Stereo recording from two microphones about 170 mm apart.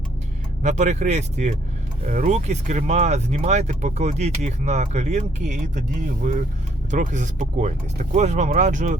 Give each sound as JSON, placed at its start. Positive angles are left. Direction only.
{"t": 0.6, "sound": "speech", "side_deg": -45}
{"t": 6.9, "sound": "speech", "side_deg": -45}